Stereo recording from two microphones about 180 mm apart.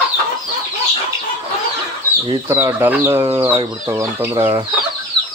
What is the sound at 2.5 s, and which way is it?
Speech, 10° right (ahead or behind).